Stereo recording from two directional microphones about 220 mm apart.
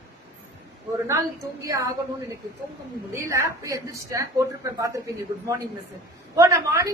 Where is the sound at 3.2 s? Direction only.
15° right (ahead or behind).